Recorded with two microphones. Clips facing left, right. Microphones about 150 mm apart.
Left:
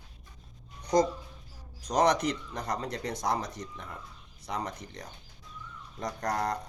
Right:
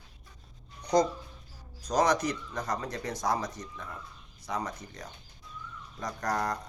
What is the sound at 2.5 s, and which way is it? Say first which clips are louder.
Speech: even; 30° left (ahead or behind).